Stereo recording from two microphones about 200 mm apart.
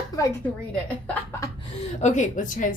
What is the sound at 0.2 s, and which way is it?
A woman's voice, 10° left (ahead or behind).